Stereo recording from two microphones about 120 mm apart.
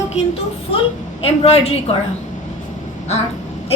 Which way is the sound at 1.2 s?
55° left (ahead or behind).